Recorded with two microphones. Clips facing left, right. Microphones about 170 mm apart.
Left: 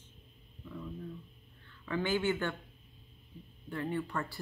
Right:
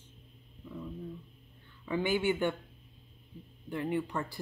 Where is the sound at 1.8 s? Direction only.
15° right (ahead or behind).